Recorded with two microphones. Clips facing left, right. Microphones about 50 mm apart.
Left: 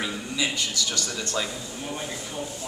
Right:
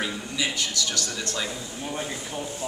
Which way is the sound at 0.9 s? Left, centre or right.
Left.